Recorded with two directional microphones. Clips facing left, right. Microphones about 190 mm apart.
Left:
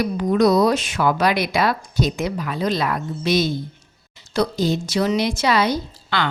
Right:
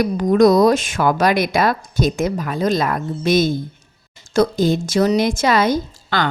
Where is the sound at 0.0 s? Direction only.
45° right (ahead or behind).